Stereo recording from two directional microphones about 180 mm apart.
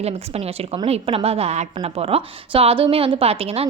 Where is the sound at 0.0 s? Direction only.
35° right (ahead or behind).